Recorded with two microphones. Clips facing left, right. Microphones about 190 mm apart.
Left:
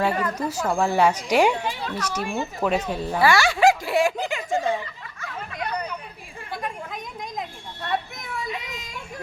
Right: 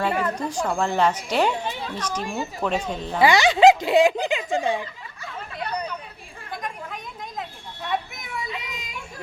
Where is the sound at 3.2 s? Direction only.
20° right (ahead or behind).